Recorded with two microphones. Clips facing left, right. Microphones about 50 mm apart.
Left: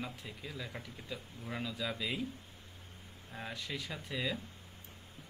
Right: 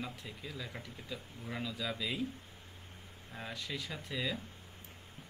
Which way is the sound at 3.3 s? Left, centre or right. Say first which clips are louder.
Even; centre.